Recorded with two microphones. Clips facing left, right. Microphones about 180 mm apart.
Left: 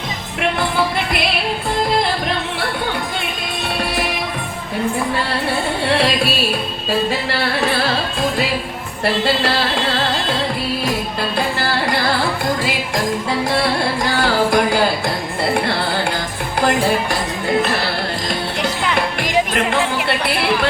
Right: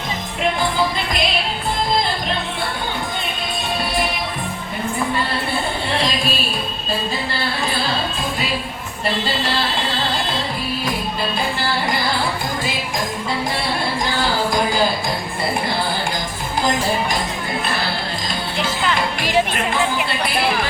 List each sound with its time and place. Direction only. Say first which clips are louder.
7.1 s music: left 4 dB; 70° left (ahead or behind)
14.2 s music: left 5 dB; 70° left (ahead or behind)
16.6 s music: left 3 dB; 70° left (ahead or behind)
20.1 s chatter: left 2 dB; 65° left (ahead or behind)